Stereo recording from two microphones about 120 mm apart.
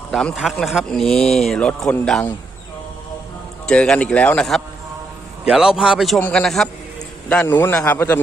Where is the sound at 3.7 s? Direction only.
5° left (ahead or behind).